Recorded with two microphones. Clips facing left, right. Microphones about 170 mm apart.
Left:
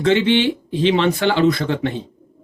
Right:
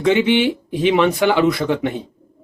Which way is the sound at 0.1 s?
15° right (ahead or behind).